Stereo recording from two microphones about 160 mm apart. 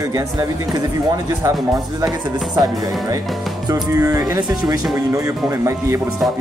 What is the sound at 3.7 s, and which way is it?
Speech, 20° right (ahead or behind).